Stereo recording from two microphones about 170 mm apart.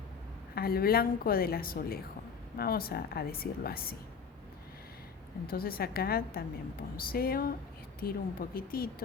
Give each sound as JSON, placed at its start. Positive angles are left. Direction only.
{"t": 0.5, "sound": "a woman's voice", "side_deg": 65}
{"t": 5.5, "sound": "a woman's voice", "side_deg": 60}